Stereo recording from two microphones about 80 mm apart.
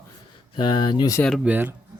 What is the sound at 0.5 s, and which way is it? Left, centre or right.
Speech, left.